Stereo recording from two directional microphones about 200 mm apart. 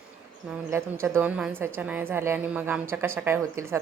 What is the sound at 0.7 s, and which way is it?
Speech, 10° right (ahead or behind).